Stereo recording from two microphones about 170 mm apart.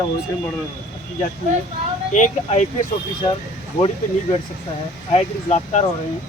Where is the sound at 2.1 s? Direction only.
45° left (ahead or behind).